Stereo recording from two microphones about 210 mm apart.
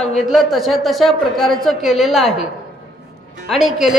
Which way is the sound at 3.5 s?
Centre (ahead or behind).